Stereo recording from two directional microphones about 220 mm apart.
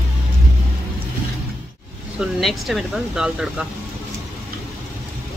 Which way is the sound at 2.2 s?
Centre (ahead or behind).